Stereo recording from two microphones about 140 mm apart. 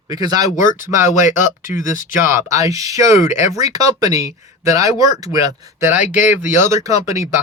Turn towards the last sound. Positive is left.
turn(degrees=-20)  # may be behind; listen again after turning